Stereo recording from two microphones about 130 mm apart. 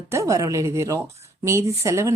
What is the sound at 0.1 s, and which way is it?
Speech, 25° right (ahead or behind).